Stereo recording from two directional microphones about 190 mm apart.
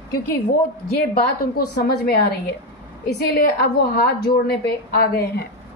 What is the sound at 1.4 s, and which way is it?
A woman's voice, 50° left (ahead or behind).